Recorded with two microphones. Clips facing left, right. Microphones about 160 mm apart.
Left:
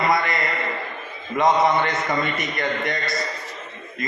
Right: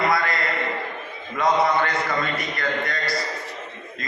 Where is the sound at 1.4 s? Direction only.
20° left (ahead or behind).